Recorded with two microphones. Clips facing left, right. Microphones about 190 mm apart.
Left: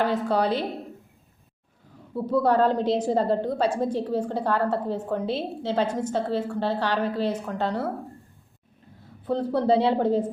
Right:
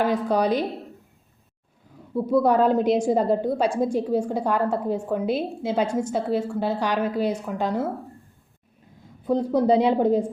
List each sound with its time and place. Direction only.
0.0 s a woman's voice: 10° right (ahead or behind)
2.1 s a woman's voice: 10° right (ahead or behind)
9.2 s a woman's voice: 15° right (ahead or behind)